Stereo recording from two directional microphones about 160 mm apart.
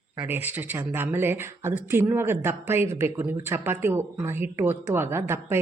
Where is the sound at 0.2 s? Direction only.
10° right (ahead or behind).